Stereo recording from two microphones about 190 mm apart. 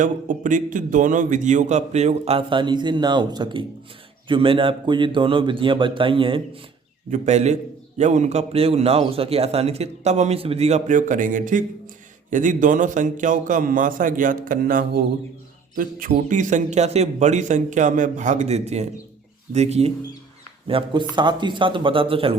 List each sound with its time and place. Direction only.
0.0 s a man's voice: 40° right (ahead or behind)